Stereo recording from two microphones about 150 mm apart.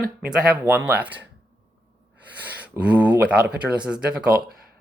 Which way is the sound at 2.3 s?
10° right (ahead or behind).